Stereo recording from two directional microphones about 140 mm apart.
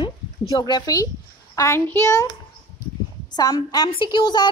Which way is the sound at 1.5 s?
20° left (ahead or behind).